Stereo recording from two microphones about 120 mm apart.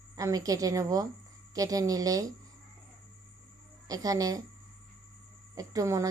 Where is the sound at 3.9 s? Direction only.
30° right (ahead or behind).